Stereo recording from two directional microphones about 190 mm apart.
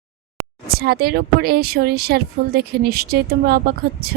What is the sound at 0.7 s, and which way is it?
Speech, 55° right (ahead or behind).